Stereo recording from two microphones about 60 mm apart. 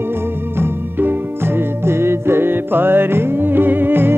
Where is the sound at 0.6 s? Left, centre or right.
Right.